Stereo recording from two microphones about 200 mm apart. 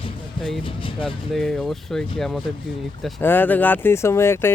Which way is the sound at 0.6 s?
25° left (ahead or behind).